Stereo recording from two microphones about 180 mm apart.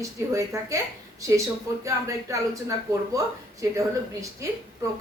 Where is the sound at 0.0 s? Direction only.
15° right (ahead or behind).